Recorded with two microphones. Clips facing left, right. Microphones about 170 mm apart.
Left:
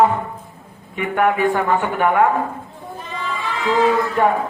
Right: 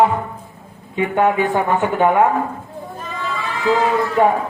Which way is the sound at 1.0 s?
20° right (ahead or behind).